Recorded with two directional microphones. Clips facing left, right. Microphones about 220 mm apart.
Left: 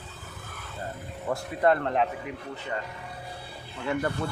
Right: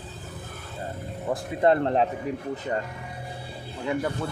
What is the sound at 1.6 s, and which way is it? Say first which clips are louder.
Speech: right 3 dB; 25° right (ahead or behind).